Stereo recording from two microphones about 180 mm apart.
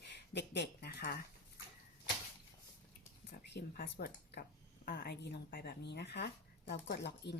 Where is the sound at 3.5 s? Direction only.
70° left (ahead or behind).